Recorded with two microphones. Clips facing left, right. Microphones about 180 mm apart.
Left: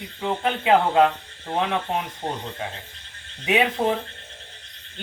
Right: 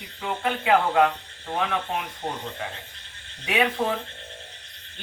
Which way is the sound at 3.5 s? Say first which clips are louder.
Left 3 dB; 20° left (ahead or behind).